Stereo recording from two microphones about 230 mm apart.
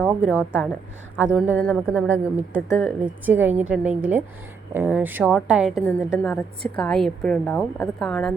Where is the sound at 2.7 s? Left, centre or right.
Centre.